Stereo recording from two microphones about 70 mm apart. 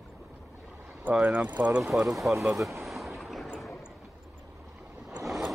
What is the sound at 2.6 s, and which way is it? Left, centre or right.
Boat, centre.